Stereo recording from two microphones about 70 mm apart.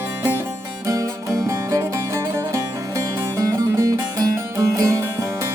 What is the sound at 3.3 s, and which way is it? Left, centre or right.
Music, right.